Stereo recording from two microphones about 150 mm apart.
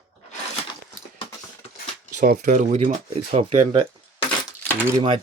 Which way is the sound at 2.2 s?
55° right (ahead or behind).